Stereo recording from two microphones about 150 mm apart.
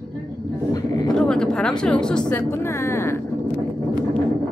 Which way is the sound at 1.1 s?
5° left (ahead or behind).